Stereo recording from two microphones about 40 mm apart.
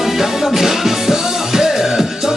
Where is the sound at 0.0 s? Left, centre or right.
Centre.